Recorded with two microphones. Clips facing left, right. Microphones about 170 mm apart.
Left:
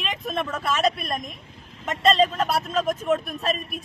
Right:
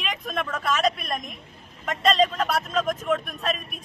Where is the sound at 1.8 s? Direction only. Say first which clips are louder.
Left 1 dB; centre (ahead or behind).